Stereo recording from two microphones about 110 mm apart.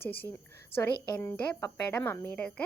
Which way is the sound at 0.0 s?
15° left (ahead or behind).